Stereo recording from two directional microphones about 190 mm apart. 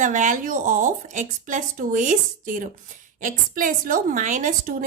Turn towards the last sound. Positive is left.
turn(degrees=-45)  # may be behind; listen again after turning